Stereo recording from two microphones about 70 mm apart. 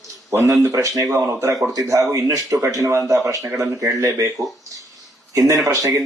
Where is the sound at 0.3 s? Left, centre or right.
Right.